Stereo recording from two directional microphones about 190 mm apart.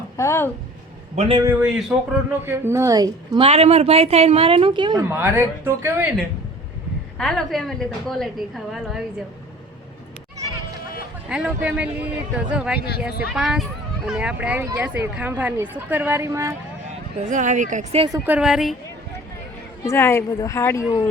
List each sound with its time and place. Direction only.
0.2 s speech: 15° left (ahead or behind)
1.1 s a man's voice: 35° right (ahead or behind)
1.4 s speech: 10° right (ahead or behind)
3.4 s speech: 30° right (ahead or behind)
5.0 s speech: 10° right (ahead or behind)
7.2 s a woman's voice: centre (ahead or behind)
11.3 s a woman's voice: 5° right (ahead or behind)
17.2 s speech: 40° right (ahead or behind)
18.3 s a woman's voice: 5° right (ahead or behind)
19.8 s speech: 15° left (ahead or behind)